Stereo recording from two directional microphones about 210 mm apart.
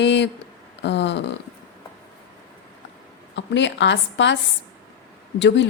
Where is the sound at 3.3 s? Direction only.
60° left (ahead or behind).